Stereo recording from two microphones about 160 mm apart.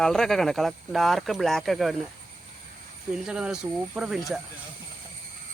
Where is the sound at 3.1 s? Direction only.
5° right (ahead or behind).